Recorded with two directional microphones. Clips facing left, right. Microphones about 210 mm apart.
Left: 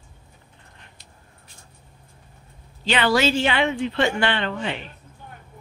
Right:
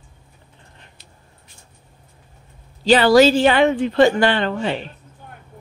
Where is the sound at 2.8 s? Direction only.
35° right (ahead or behind).